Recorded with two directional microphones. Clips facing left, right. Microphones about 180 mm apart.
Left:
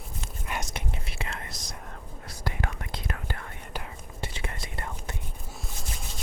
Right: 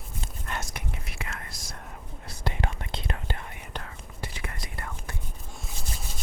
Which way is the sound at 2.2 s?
25° right (ahead or behind).